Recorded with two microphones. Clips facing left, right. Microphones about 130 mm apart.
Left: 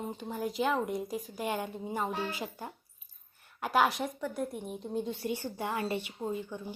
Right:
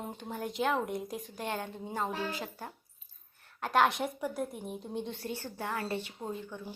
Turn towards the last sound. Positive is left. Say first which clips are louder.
# left 4 dB
turn(degrees=10)  # may be behind; listen again after turning